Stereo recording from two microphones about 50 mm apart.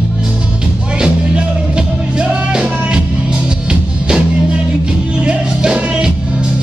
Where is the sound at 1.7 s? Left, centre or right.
Centre.